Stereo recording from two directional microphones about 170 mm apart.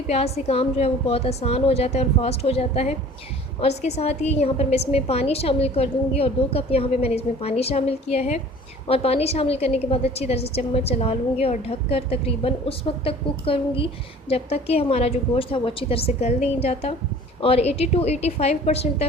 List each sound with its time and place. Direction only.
0.1 s a woman's voice: 40° left (ahead or behind)